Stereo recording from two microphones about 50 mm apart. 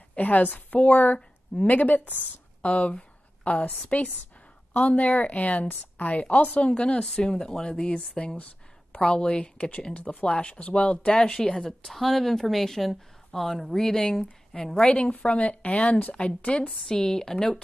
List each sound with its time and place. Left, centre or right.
0.1 s a woman's voice: left; by 11.9 s centre
11.9 s speech: centre; by 16.7 s left
16.7 s speech: centre